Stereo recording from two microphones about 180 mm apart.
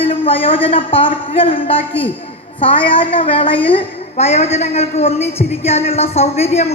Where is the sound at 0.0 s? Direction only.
30° left (ahead or behind).